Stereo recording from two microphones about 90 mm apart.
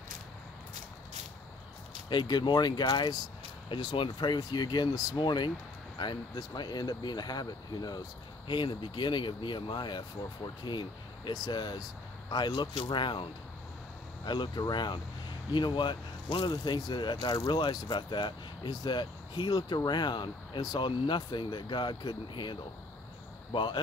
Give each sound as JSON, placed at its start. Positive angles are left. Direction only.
{"t": 2.0, "sound": "speech", "side_deg": 55}
{"t": 3.6, "sound": "speech", "side_deg": 65}
{"t": 5.2, "sound": "speech", "side_deg": 55}
{"t": 8.5, "sound": "speech", "side_deg": 65}